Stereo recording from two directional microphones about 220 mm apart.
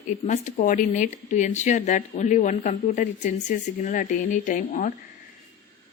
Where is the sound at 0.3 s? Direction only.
35° left (ahead or behind).